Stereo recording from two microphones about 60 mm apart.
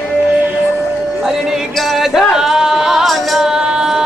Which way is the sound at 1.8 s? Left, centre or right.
Centre.